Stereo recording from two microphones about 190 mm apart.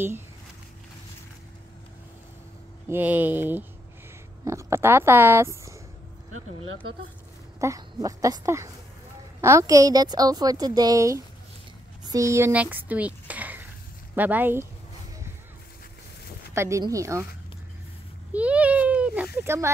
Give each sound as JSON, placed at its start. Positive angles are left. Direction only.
{"t": 2.9, "sound": "speech", "side_deg": -10}
{"t": 7.6, "sound": "a woman's voice", "side_deg": -15}
{"t": 16.5, "sound": "speech", "side_deg": -15}
{"t": 18.3, "sound": "a sound", "side_deg": -5}